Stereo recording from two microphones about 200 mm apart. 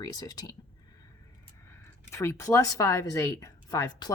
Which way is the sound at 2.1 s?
15° left (ahead or behind).